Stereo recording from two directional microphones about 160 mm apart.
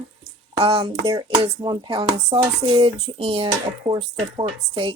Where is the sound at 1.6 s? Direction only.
30° right (ahead or behind).